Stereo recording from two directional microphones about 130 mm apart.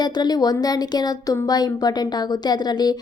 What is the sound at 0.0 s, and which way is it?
Speech, 30° left (ahead or behind).